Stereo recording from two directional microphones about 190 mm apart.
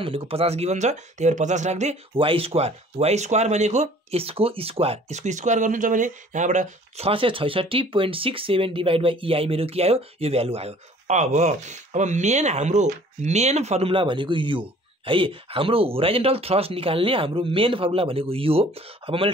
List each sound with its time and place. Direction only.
0.0 s speech: 30° right (ahead or behind)